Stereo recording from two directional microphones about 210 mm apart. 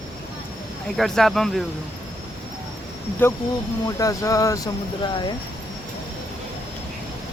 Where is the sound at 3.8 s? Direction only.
15° left (ahead or behind).